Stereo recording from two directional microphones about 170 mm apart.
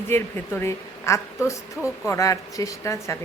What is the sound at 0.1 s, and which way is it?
Speech, 15° left (ahead or behind).